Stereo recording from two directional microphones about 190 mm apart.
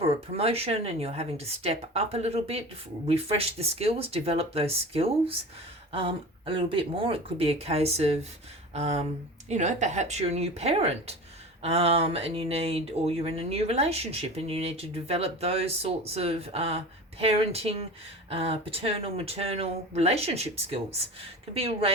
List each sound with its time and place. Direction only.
0.0 s speech: 30° right (ahead or behind)
21.5 s speech: 30° right (ahead or behind)